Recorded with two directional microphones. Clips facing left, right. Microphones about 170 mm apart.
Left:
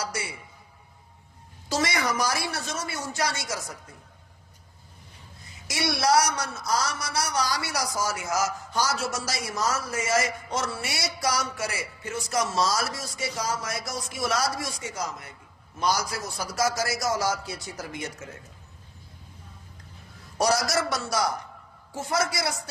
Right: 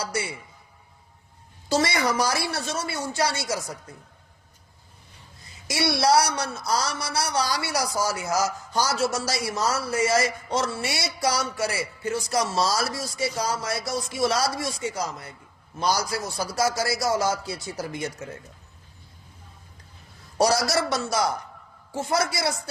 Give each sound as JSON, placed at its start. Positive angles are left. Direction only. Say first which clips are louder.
{"t": 1.7, "sound": "a man's voice", "louder": "right 3 dB", "side_deg": -30}
{"t": 5.6, "sound": "a man's voice", "louder": "right 3 dB", "side_deg": -30}
{"t": 20.4, "sound": "a man's voice", "louder": "right 2 dB", "side_deg": -30}